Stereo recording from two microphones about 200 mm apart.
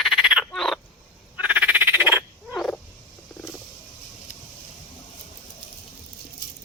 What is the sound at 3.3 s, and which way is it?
Wild animals, 5° left (ahead or behind).